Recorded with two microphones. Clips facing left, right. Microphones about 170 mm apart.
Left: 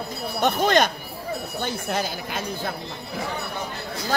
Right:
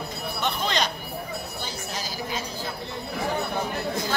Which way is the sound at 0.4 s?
45° left (ahead or behind).